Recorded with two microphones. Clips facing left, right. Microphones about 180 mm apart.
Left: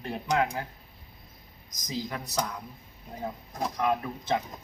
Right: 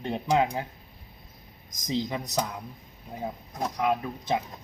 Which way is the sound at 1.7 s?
25° right (ahead or behind).